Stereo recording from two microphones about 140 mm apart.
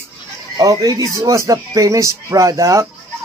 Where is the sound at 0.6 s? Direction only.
25° right (ahead or behind).